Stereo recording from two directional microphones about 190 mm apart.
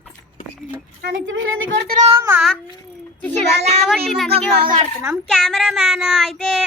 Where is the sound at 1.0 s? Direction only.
75° right (ahead or behind).